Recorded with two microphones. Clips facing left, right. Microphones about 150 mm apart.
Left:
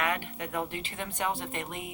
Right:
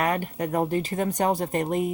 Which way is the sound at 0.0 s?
40° right (ahead or behind).